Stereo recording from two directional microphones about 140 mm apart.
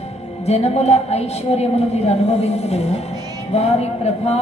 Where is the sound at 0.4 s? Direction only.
50° left (ahead or behind).